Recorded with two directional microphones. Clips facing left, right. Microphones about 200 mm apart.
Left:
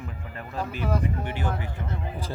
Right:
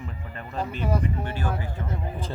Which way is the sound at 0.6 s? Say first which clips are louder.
Right 1 dB; 5° left (ahead or behind).